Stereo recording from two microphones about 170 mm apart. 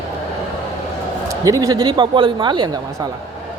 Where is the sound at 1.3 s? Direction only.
20° right (ahead or behind).